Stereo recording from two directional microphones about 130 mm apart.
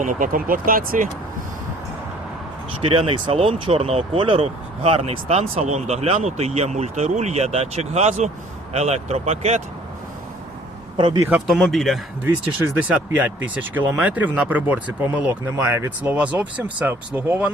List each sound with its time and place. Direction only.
0.0 s speech: 90° right
2.8 s speech: 45° right (ahead or behind)
10.9 s speech: 35° right (ahead or behind)
11.3 s speech: 5° right (ahead or behind)
12.7 s speech: 10° right (ahead or behind)